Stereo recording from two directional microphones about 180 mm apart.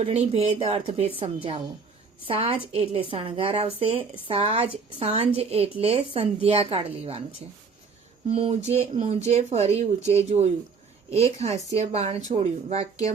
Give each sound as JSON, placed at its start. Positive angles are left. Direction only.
{"t": 0.0, "sound": "a woman's voice", "side_deg": -35}
{"t": 8.3, "sound": "a woman's voice", "side_deg": -35}